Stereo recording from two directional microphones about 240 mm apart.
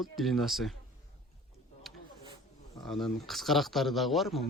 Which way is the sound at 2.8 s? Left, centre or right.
Centre.